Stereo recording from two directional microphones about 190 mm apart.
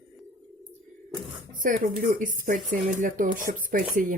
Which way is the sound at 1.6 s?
45° right (ahead or behind).